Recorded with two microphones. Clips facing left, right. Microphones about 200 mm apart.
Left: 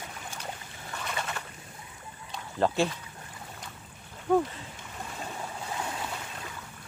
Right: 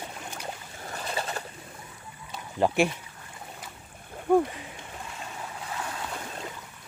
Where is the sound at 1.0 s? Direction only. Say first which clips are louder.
Right 3 dB; 35° right (ahead or behind).